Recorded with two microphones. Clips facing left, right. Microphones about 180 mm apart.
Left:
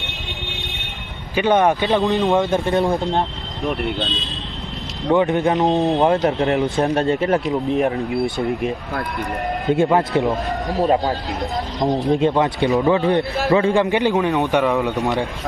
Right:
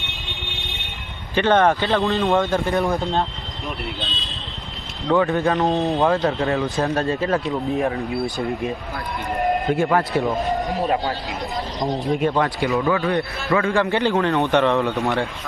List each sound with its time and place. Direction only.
1.4 s speech: 15° left (ahead or behind)
5.0 s a man's voice: 20° left (ahead or behind)
9.7 s a man's voice: 20° left (ahead or behind)
11.8 s a man's voice: 25° left (ahead or behind)